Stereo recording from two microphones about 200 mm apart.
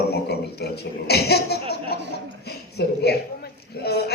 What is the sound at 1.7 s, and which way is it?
Chuckle, 55° left (ahead or behind).